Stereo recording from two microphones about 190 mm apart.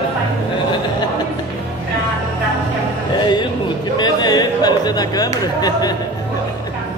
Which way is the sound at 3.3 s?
25° left (ahead or behind).